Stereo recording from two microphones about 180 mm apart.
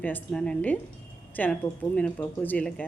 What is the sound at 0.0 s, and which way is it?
A woman's voice, 5° left (ahead or behind).